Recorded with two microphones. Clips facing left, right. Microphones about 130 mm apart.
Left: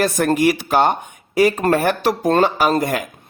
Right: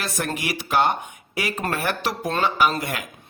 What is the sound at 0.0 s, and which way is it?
Speech, 50° left (ahead or behind).